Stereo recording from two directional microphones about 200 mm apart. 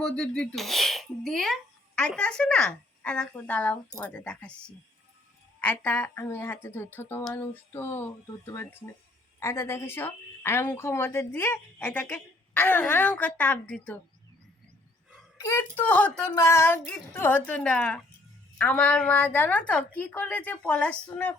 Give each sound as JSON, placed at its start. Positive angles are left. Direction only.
{"t": 0.0, "sound": "a woman's voice", "side_deg": 5}
{"t": 15.4, "sound": "a woman's voice", "side_deg": 10}